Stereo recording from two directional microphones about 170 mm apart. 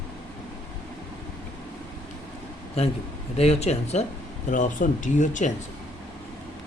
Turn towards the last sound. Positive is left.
turn(degrees=45)  # may be behind; listen again after turning